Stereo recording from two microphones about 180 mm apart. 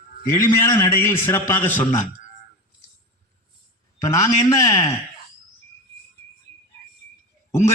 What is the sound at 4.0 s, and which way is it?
Speech, 15° left (ahead or behind).